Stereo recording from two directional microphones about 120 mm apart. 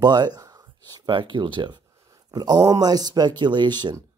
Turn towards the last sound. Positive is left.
turn(degrees=-40)  # may be behind; listen again after turning